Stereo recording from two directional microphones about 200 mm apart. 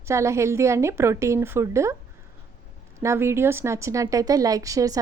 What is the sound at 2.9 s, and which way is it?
A woman's voice, 15° right (ahead or behind).